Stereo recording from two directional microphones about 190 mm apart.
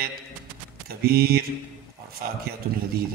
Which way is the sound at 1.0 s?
55° right (ahead or behind).